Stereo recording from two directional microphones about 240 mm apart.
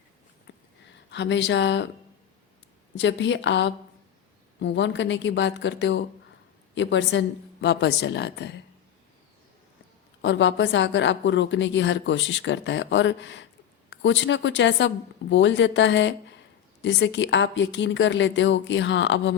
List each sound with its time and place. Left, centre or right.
1.1 s a woman's voice: left
3.0 s a woman's voice: left
10.2 s a woman's voice: left